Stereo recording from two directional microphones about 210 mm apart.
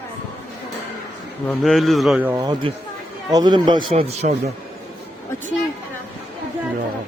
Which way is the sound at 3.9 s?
30° right (ahead or behind).